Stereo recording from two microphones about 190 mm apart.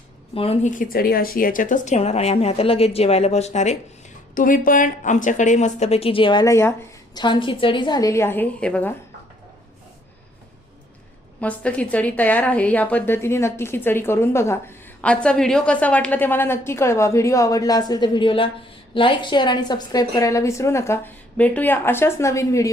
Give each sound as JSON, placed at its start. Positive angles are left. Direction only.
{"t": 0.3, "sound": "speech", "side_deg": 30}
{"t": 6.4, "sound": "a woman's voice", "side_deg": 15}
{"t": 11.3, "sound": "a woman's voice", "side_deg": 5}